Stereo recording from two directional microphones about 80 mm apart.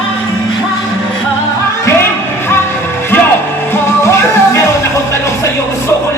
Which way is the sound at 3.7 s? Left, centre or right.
Left.